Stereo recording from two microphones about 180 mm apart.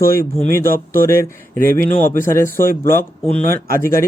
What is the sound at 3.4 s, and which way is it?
Speech, 55° right (ahead or behind).